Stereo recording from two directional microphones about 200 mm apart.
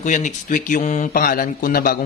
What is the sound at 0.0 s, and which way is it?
Speech, 40° left (ahead or behind).